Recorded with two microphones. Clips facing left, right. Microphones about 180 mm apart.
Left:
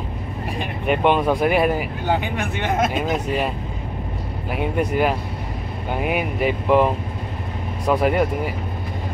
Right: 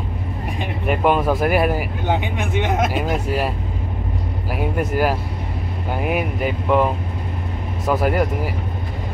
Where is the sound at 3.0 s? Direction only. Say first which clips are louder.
Even; 10° right (ahead or behind).